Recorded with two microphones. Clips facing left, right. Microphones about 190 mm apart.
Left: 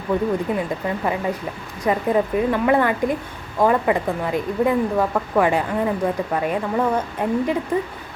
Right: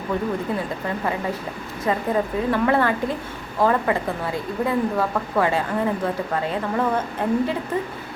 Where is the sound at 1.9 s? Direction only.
15° left (ahead or behind).